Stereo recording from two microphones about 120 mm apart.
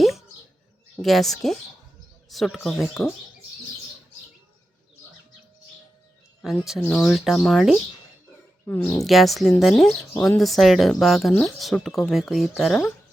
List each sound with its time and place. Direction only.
1.0 s speech: centre (ahead or behind)
6.4 s speech: 5° right (ahead or behind)
8.6 s speech: 15° left (ahead or behind)
9.0 s speech: centre (ahead or behind)